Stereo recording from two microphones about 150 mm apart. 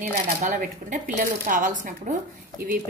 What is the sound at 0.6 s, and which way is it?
Speech, 65° right (ahead or behind).